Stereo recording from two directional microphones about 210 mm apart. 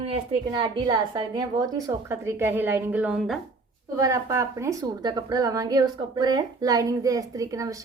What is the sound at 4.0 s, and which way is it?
A woman's voice, 15° right (ahead or behind).